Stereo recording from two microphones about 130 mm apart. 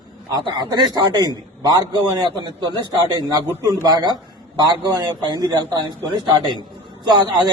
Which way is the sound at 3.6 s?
30° right (ahead or behind).